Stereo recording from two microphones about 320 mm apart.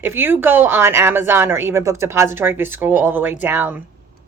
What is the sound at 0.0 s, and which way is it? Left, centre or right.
A woman's voice, centre.